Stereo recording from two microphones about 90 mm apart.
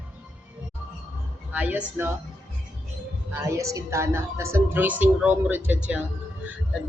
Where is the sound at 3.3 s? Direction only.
35° right (ahead or behind); by 5.6 s 20° right (ahead or behind).